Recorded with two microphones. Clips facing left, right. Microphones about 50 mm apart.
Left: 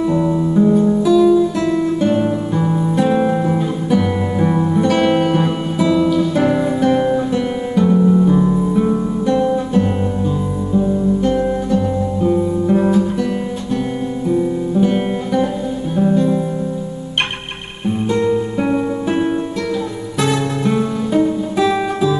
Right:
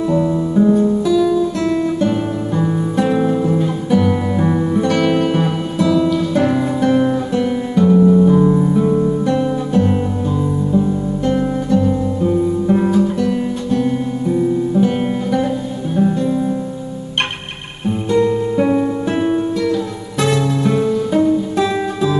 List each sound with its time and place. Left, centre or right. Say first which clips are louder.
0.1 s music: even; centre
4.9 s music: left 1 dB; centre
5.2 s music: left 1 dB; centre
18.1 s music: right 3 dB; centre
20.2 s music: right 2 dB; centre